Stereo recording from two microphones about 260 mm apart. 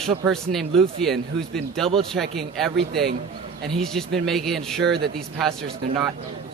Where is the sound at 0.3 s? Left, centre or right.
Centre.